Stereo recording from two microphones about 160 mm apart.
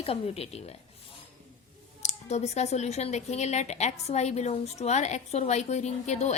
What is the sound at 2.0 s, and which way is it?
Speech, 45° left (ahead or behind).